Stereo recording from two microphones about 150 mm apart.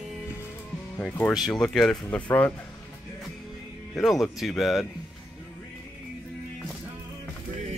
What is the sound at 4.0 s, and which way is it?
Speech, centre (ahead or behind).